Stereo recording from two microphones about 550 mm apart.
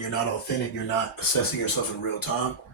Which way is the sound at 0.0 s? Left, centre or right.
Left.